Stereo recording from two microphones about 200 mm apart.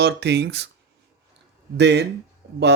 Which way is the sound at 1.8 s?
60° right (ahead or behind).